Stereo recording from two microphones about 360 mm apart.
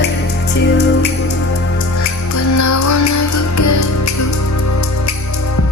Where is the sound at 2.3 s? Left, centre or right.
Left.